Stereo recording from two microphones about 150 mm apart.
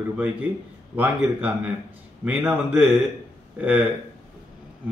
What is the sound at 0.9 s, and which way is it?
Speech, 10° right (ahead or behind).